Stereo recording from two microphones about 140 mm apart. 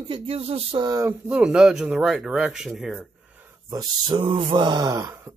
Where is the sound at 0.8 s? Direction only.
25° right (ahead or behind).